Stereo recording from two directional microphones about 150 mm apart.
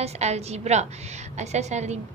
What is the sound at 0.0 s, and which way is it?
A woman's voice, 45° right (ahead or behind).